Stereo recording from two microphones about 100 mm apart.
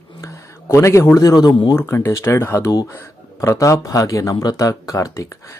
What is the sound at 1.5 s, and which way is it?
Speech, 55° left (ahead or behind).